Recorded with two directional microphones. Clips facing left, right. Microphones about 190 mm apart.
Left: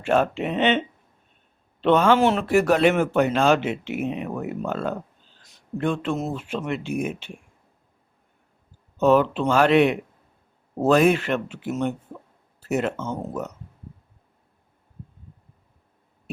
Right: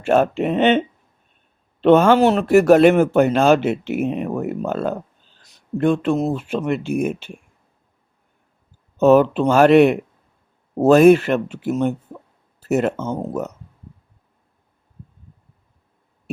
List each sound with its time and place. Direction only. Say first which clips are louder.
0.0 s speech: right 5 dB; 45° right (ahead or behind)
1.8 s speech: right 5 dB; 45° right (ahead or behind)
9.0 s speech: right 5 dB; 45° right (ahead or behind)